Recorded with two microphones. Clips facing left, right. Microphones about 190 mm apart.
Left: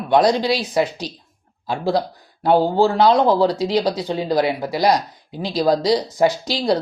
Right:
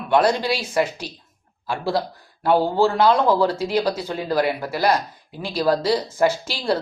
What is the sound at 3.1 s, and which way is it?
Speech, 35° left (ahead or behind).